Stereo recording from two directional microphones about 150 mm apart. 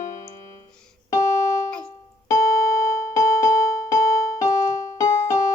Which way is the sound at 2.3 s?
20° left (ahead or behind).